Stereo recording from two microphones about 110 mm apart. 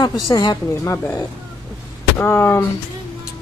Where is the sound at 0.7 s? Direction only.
25° left (ahead or behind).